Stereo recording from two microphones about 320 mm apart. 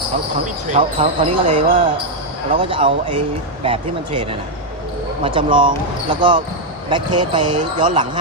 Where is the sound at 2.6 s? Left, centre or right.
Centre.